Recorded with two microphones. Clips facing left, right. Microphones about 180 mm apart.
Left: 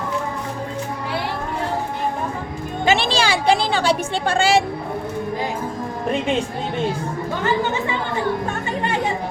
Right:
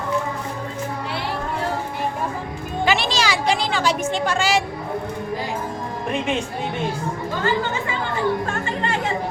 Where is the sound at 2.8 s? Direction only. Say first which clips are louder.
Left 3 dB; 30° left (ahead or behind).